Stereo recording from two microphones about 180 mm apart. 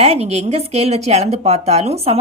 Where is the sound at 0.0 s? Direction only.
35° right (ahead or behind).